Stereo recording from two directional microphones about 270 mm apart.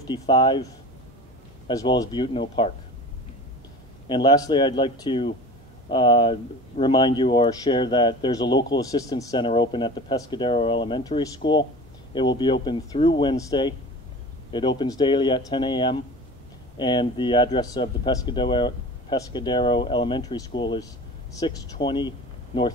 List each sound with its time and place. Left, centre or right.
0.1 s speech: centre
1.7 s speech: centre
4.1 s speech: centre
14.8 s speech: centre